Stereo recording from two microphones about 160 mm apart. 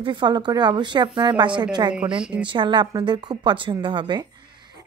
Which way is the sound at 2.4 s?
30° right (ahead or behind).